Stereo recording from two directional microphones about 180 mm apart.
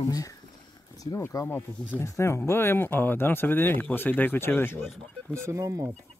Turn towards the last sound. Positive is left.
turn(degrees=-15)  # may be behind; listen again after turning